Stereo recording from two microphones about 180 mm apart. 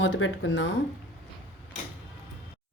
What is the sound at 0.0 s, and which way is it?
Speech, 85° left.